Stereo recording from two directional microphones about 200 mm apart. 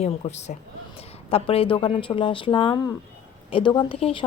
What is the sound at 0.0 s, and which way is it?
A woman's voice, 35° left (ahead or behind).